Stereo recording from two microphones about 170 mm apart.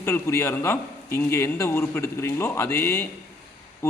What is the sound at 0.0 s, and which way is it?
A man's voice, 15° left (ahead or behind).